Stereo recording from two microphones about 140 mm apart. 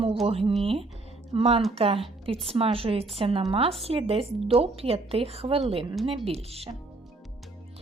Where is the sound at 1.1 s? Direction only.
45° right (ahead or behind).